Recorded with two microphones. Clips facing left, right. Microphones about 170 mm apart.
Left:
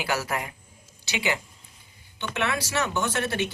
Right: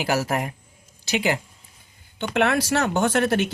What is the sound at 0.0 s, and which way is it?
Speech, 40° right (ahead or behind).